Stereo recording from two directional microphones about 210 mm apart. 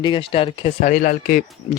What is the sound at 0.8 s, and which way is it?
Speech, 40° left (ahead or behind).